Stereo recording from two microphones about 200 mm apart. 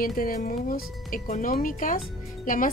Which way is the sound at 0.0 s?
45° left (ahead or behind).